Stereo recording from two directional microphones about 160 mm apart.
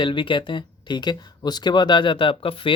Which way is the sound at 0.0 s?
30° left (ahead or behind).